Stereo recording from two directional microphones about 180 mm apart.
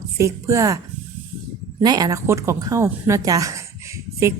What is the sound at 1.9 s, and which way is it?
A woman's voice, 20° right (ahead or behind).